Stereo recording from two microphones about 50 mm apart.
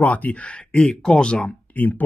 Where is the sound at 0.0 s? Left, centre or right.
Left.